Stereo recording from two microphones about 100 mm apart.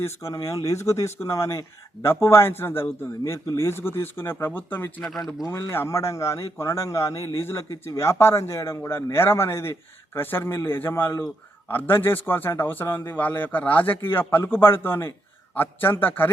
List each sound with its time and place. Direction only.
0.0 s a man's voice: 30° left (ahead or behind)
5.0 s speech: centre (ahead or behind)
5.5 s a man's voice: 25° left (ahead or behind)